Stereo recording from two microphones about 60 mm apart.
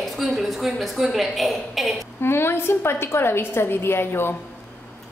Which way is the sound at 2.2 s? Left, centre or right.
Left.